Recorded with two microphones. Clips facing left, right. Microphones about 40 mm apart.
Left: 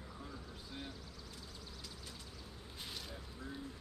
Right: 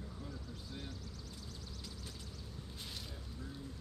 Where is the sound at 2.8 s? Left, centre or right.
Centre.